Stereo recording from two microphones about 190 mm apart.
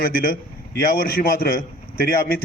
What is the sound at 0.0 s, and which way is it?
A man's voice, 50° left (ahead or behind).